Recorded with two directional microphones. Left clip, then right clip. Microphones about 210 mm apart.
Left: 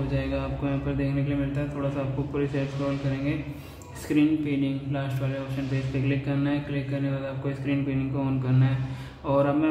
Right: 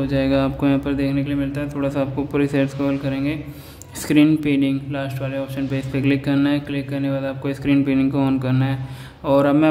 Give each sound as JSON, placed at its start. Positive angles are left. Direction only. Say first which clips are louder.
{"t": 0.1, "sound": "speech", "louder": "right 13 dB", "side_deg": -50}